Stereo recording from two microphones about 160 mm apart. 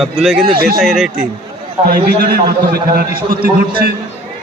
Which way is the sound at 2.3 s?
70° right (ahead or behind).